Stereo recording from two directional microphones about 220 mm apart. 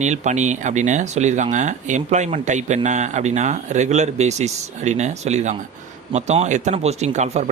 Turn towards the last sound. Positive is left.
turn(degrees=-30)  # may be behind; listen again after turning